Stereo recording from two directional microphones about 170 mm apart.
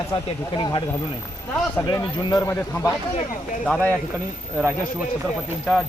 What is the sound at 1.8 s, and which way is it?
Speech, 20° left (ahead or behind).